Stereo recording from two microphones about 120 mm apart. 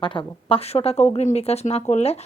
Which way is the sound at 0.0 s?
45° left (ahead or behind).